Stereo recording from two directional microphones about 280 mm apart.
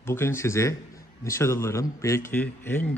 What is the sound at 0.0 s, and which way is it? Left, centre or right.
A man's voice, centre.